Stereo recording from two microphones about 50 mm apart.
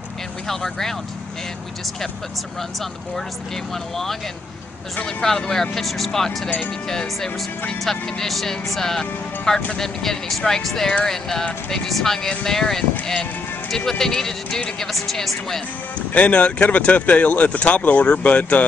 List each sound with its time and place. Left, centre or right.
0.5 s speech: centre
3.9 s speech: centre
16.1 s speech: left